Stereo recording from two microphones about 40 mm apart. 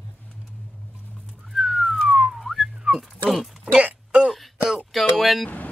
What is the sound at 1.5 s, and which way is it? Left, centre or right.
Whistling, centre.